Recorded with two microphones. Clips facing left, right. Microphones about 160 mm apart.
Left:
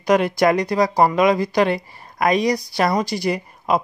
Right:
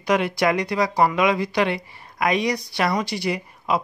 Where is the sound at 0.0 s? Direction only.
40° left (ahead or behind).